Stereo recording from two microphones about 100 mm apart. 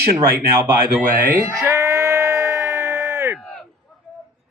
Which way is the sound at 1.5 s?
30° right (ahead or behind).